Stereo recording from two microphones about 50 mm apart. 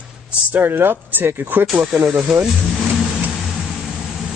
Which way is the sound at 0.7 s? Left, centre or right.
Right.